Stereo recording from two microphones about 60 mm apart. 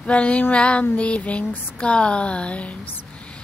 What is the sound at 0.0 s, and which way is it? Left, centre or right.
Female singing, left.